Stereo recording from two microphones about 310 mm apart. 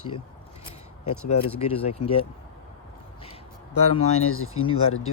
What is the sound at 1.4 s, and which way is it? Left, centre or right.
Speech, centre.